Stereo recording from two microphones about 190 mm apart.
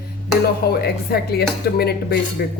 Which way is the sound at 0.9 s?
55° left (ahead or behind).